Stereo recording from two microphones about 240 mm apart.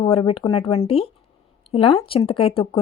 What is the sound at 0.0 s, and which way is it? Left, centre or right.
Speech, left.